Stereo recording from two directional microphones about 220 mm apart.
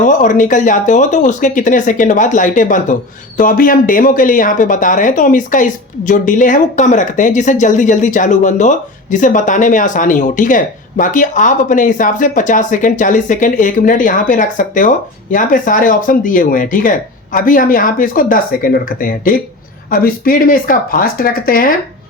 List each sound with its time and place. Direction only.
0.0 s speech: 35° left (ahead or behind)